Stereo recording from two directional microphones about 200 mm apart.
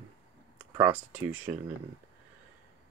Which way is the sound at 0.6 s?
10° right (ahead or behind).